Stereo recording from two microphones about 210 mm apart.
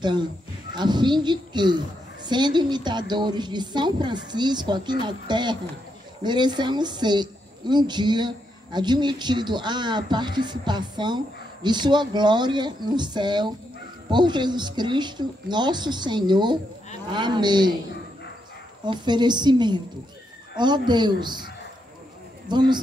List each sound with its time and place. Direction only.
0.7 s a woman's voice: 20° right (ahead or behind)
18.9 s a woman's voice: 20° right (ahead or behind)
22.5 s a woman's voice: 20° right (ahead or behind)